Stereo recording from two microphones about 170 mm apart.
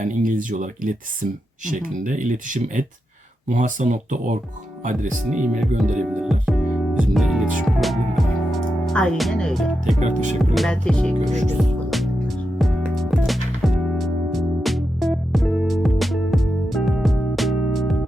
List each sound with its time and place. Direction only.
0.0 s speech: 50° right (ahead or behind)
5.2 s speech: 5° right (ahead or behind)
10.0 s speech: 45° right (ahead or behind)
10.5 s speech: centre (ahead or behind)
11.5 s music: centre (ahead or behind)